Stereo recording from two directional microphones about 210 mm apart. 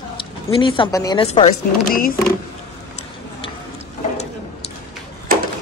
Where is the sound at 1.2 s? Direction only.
30° left (ahead or behind).